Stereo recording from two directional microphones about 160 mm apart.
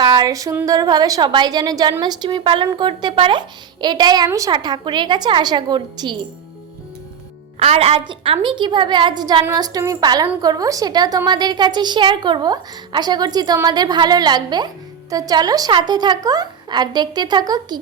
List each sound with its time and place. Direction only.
0.0 s a woman's voice: 25° right (ahead or behind)
7.6 s a woman's voice: 40° right (ahead or behind)